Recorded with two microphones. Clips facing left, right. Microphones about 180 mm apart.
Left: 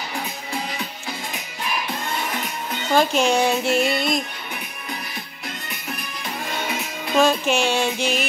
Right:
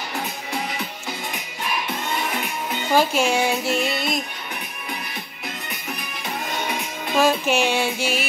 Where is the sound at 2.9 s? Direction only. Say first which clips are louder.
Left 1 dB; 5° right (ahead or behind).